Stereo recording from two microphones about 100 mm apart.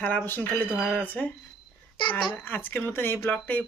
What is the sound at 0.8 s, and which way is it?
Speech, 15° left (ahead or behind).